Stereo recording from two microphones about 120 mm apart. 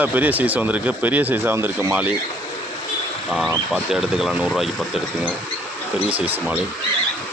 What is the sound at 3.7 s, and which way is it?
Speech, 5° right (ahead or behind).